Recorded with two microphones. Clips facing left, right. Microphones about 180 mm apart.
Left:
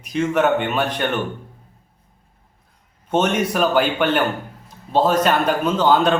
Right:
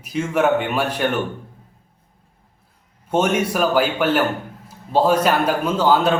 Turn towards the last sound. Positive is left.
turn(degrees=-5)  # may be behind; listen again after turning